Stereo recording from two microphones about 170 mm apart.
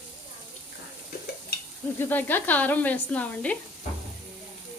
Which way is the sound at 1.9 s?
10° left (ahead or behind).